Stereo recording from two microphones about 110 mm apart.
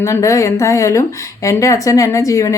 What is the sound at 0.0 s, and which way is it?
Speech, 30° left (ahead or behind).